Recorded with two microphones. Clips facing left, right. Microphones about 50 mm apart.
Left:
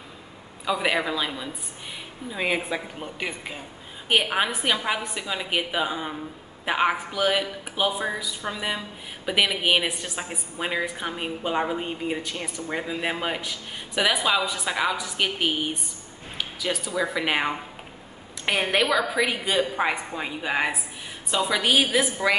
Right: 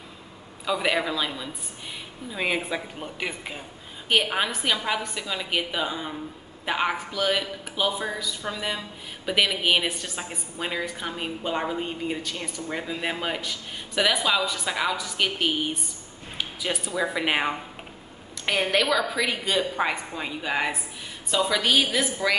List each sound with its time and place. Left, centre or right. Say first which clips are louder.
0.7 s a man's voice: left 1 dB; centre
4.1 s a man's voice: left 1 dB; centre
16.3 s speech: left 1 dB; centre
18.4 s a man's voice: even; centre